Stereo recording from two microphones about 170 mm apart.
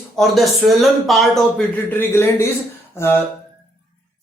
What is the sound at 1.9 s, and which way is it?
Speech, 15° left (ahead or behind).